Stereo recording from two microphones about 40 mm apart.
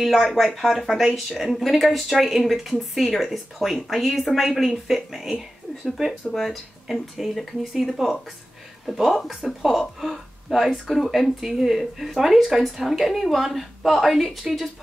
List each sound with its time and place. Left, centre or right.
0.0 s a woman's voice: centre
6.3 s speech: centre
7.2 s speech: centre
8.9 s speech: centre